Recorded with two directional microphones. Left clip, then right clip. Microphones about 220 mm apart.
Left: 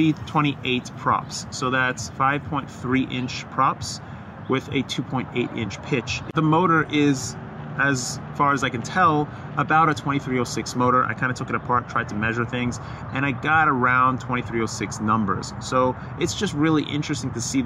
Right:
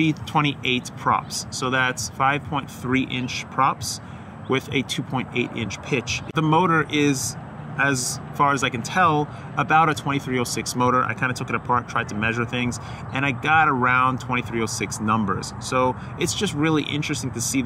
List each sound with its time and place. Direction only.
0.0 s speech: 20° right (ahead or behind)